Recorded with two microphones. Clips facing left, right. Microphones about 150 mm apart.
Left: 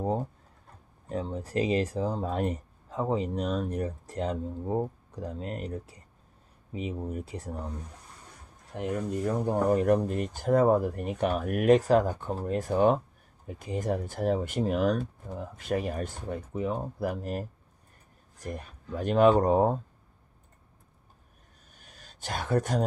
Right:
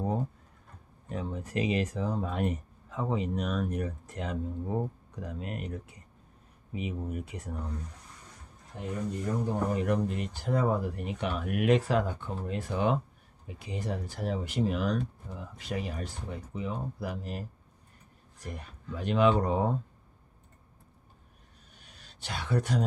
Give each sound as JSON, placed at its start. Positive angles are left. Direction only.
{"t": 1.1, "sound": "speech", "side_deg": 35}
{"t": 8.7, "sound": "speech", "side_deg": 75}
{"t": 9.5, "sound": "speech", "side_deg": 45}
{"t": 18.9, "sound": "speech", "side_deg": 45}
{"t": 22.2, "sound": "speech", "side_deg": 45}